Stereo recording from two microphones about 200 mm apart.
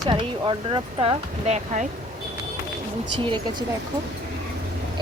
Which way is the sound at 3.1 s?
25° right (ahead or behind).